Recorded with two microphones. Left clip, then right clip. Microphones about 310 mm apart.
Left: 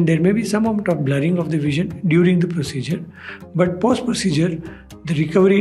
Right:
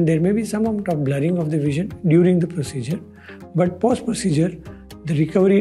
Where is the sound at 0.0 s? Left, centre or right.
Right.